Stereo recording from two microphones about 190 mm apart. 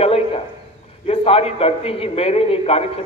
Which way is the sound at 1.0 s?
30° left (ahead or behind).